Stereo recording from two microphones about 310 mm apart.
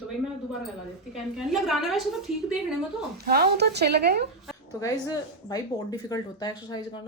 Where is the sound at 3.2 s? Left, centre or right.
Right.